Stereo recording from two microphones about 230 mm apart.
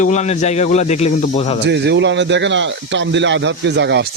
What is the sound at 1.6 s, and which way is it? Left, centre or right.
Speech, right.